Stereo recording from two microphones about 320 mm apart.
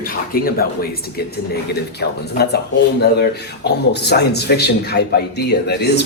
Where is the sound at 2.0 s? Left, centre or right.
Left.